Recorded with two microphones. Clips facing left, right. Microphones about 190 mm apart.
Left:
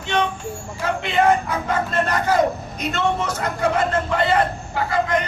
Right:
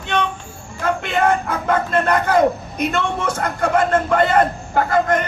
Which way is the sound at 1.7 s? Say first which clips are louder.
Right 5 dB; 55° right (ahead or behind).